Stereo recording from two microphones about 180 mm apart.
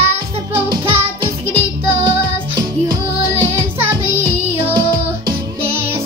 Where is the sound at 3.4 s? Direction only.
15° right (ahead or behind).